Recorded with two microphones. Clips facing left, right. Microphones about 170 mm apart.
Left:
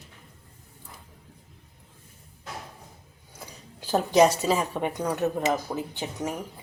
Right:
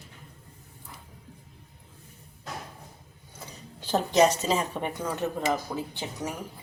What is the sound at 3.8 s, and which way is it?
A woman's voice, 10° left (ahead or behind).